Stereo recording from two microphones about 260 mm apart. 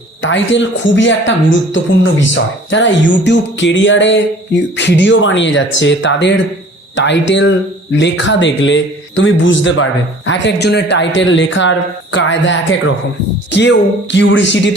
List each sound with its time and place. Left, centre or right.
0.2 s speech: left